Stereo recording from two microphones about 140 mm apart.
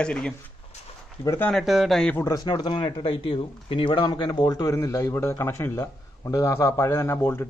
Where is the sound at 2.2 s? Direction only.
30° left (ahead or behind).